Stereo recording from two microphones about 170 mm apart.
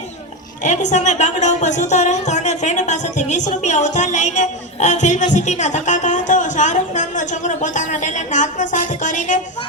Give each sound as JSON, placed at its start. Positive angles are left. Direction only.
{"t": 0.6, "sound": "a woman's voice", "side_deg": 45}